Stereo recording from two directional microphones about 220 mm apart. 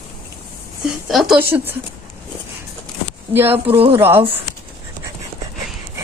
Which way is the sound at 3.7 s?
25° right (ahead or behind).